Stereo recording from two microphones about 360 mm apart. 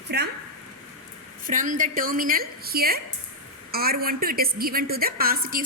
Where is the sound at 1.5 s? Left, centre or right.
Right.